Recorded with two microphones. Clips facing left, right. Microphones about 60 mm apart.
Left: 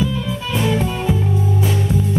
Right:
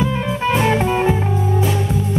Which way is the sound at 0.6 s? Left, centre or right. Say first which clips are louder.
Right 2 dB; right.